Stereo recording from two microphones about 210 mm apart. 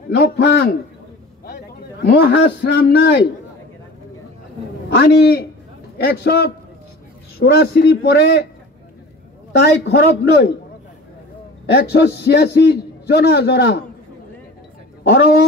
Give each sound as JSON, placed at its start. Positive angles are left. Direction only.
{"t": 0.1, "sound": "a man's voice", "side_deg": 50}
{"t": 4.8, "sound": "a man's voice", "side_deg": 50}
{"t": 9.6, "sound": "a man's voice", "side_deg": 50}
{"t": 11.7, "sound": "a man's voice", "side_deg": 50}